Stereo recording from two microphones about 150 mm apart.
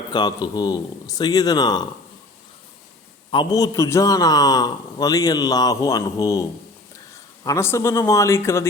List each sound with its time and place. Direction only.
0.1 s a man's voice: 30° left (ahead or behind)
3.3 s a man's voice: 25° left (ahead or behind)
7.4 s a man's voice: 20° left (ahead or behind)